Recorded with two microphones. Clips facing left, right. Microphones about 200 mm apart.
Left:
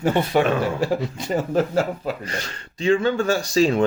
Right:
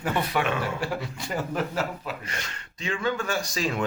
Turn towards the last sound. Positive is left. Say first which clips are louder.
# left 10 dB
turn(degrees=30)  # may be behind; listen again after turning